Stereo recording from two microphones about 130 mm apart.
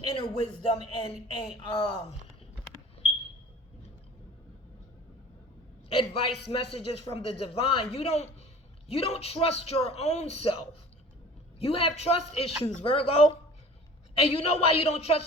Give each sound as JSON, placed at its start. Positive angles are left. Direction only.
{"t": 0.1, "sound": "speech", "side_deg": 40}
{"t": 5.9, "sound": "a man's voice", "side_deg": 45}